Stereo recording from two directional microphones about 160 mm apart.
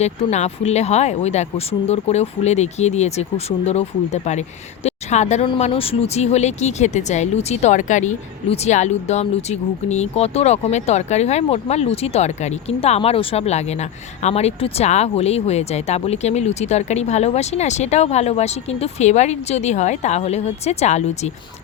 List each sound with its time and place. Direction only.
0.0 s speech: 45° left (ahead or behind)